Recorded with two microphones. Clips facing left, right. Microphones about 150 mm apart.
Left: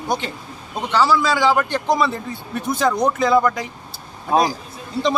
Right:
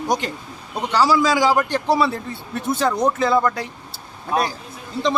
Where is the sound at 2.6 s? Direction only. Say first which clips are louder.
Left 1 dB; 30° right (ahead or behind).